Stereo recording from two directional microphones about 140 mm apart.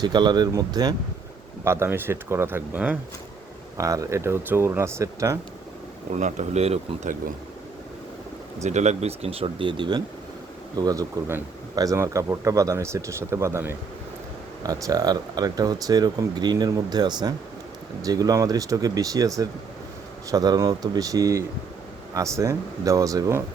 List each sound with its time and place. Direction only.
0.0 s speech: 30° right (ahead or behind); by 3.0 s 10° right (ahead or behind)
3.8 s speech: 25° right (ahead or behind)
6.1 s speech: 60° right (ahead or behind)
8.6 s speech: 55° right (ahead or behind); by 23.4 s 25° right (ahead or behind)